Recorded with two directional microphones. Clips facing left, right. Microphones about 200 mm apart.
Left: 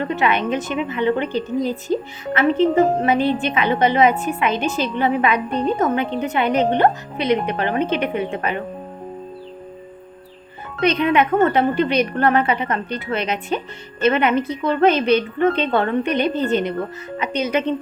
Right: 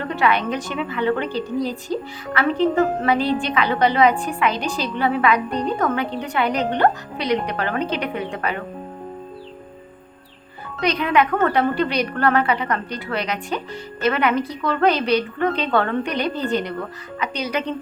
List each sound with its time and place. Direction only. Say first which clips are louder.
0.0 s a woman's voice: left 1 dB; 20° left (ahead or behind)
10.8 s a woman's voice: left 2 dB; 25° left (ahead or behind)